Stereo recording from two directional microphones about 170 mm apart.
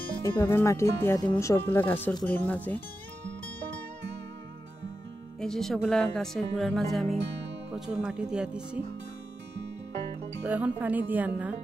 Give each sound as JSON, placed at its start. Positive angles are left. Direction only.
{"t": 0.2, "sound": "speech", "side_deg": 15}
{"t": 5.4, "sound": "speech", "side_deg": 0}
{"t": 10.4, "sound": "speech", "side_deg": -10}